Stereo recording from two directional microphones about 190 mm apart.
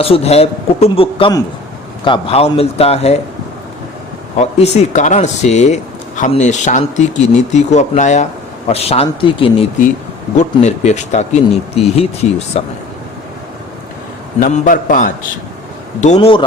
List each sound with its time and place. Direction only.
0.0 s speech: 30° left (ahead or behind)
4.4 s speech: 35° left (ahead or behind)
14.4 s a man's voice: 40° left (ahead or behind)